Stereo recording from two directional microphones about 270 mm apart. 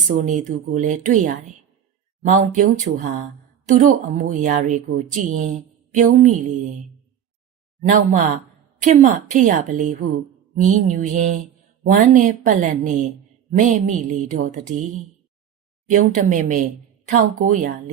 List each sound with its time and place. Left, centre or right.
0.2 s speech: right
7.9 s speech: right